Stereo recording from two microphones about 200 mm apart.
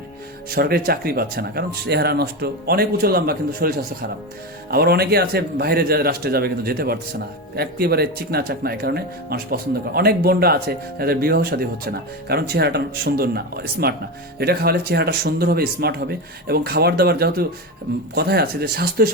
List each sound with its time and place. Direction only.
0.5 s speech: 50° right (ahead or behind)